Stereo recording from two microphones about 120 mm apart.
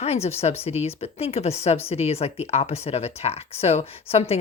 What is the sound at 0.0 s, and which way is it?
Speech, 60° left (ahead or behind).